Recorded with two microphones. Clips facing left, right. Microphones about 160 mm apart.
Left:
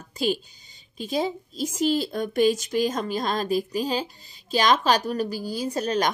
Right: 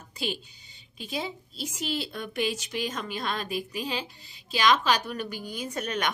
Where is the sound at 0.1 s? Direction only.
40° left (ahead or behind).